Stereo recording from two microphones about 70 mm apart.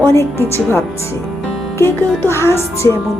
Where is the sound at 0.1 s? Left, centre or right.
Left.